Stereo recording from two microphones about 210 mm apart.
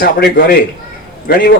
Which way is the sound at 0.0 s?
50° left (ahead or behind).